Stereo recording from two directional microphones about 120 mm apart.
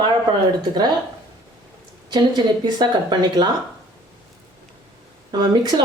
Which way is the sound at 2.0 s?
35° right (ahead or behind).